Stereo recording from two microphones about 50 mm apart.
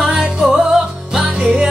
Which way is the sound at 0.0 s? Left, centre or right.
Centre.